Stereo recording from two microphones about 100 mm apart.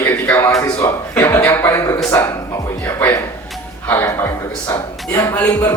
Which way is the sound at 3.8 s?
20° left (ahead or behind).